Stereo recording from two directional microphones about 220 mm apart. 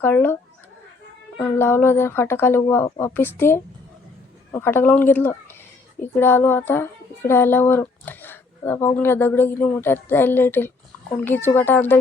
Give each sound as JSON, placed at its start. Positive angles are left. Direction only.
{"t": 0.0, "sound": "speech", "side_deg": 10}
{"t": 1.4, "sound": "speech", "side_deg": 10}